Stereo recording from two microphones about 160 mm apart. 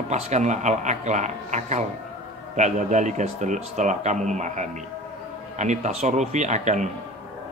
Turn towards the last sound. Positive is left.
turn(degrees=-50)  # may be behind; listen again after turning